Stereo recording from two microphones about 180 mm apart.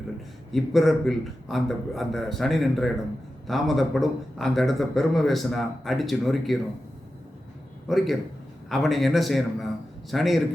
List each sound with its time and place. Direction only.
0.5 s a man's voice: centre (ahead or behind)
7.9 s a man's voice: centre (ahead or behind)